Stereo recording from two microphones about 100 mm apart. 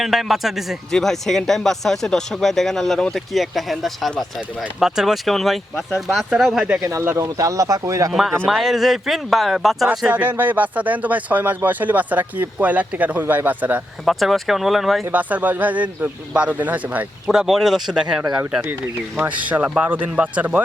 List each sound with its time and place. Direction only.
0.0 s speech: centre (ahead or behind)
6.8 s speech: 25° right (ahead or behind)
8.1 s speech: centre (ahead or behind)
10.1 s speech: 20° right (ahead or behind)
14.0 s speech: centre (ahead or behind)
15.1 s speech: 15° right (ahead or behind)
17.3 s speech: 5° right (ahead or behind)
19.2 s speech: 15° right (ahead or behind)